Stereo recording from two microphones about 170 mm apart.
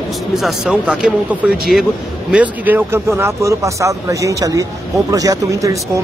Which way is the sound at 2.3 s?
10° right (ahead or behind).